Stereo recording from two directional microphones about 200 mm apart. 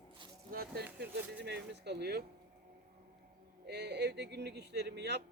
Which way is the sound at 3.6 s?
55° right (ahead or behind).